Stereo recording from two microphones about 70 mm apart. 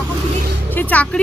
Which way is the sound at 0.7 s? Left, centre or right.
Left.